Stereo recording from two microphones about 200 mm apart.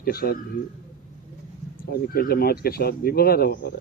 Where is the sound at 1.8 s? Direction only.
50° left (ahead or behind).